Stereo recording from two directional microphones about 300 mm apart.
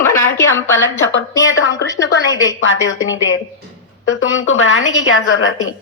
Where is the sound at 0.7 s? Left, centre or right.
Left.